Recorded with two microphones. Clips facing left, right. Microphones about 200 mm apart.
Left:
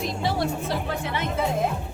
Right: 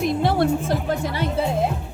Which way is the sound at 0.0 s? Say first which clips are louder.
Right 6 dB; 55° right (ahead or behind).